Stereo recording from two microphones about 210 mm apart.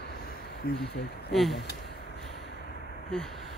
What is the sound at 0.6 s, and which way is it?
Speech, 50° left (ahead or behind).